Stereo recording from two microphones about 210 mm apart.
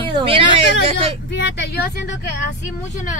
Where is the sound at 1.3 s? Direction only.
50° left (ahead or behind).